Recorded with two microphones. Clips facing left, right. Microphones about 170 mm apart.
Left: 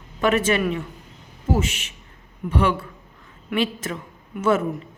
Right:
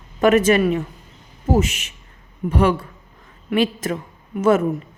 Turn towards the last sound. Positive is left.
turn(degrees=-40)  # may be behind; listen again after turning